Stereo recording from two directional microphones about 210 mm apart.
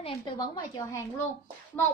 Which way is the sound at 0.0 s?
20° left (ahead or behind).